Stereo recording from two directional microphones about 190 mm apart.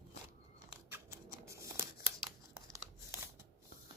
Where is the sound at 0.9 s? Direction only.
10° right (ahead or behind).